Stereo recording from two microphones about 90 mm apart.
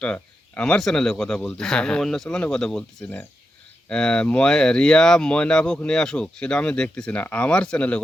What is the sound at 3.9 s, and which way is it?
Speech, 10° left (ahead or behind).